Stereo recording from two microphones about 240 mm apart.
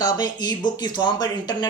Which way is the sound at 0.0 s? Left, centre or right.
Centre.